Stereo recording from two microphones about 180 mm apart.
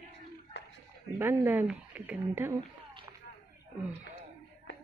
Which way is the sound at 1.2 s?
10° right (ahead or behind).